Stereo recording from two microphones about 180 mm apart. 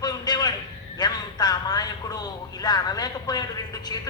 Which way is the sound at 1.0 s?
20° left (ahead or behind).